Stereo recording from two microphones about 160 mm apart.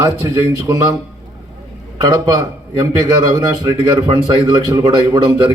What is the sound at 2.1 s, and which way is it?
Speech, 20° right (ahead or behind).